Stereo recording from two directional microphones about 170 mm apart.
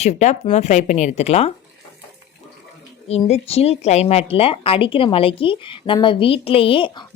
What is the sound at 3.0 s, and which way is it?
Speech, 40° left (ahead or behind).